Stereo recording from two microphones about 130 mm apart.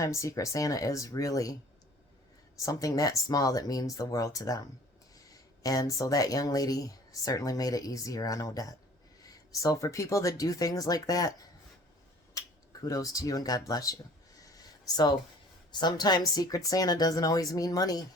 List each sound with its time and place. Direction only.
0.0 s speech: 25° left (ahead or behind)
2.6 s speech: 25° left (ahead or behind)
14.4 s a sound: 30° left (ahead or behind)
15.8 s speech: 30° left (ahead or behind)